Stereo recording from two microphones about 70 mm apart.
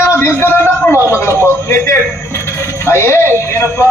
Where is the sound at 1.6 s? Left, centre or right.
Left.